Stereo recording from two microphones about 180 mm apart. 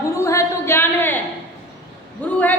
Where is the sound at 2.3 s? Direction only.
10° left (ahead or behind).